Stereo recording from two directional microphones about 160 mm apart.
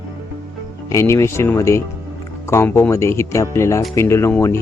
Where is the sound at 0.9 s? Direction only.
15° left (ahead or behind).